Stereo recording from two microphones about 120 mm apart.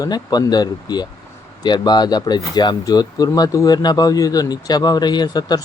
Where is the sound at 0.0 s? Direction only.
35° left (ahead or behind).